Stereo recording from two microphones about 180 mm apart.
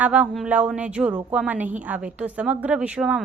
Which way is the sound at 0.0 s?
5° right (ahead or behind).